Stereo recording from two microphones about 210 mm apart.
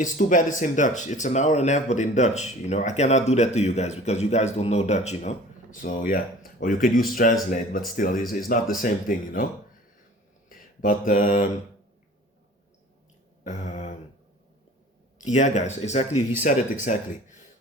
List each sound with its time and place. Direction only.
0.0 s speech: 40° left (ahead or behind)
10.5 s mantra: 40° left (ahead or behind)
13.5 s a sound: 35° left (ahead or behind)
15.2 s speech: 35° left (ahead or behind)